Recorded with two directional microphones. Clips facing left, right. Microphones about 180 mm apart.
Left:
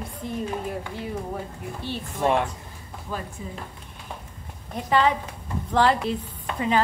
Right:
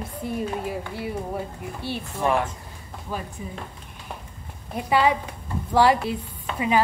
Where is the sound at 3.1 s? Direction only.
10° right (ahead or behind).